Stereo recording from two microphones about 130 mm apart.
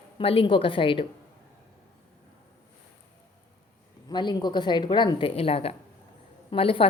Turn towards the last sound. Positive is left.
turn(degrees=45)  # may be behind; listen again after turning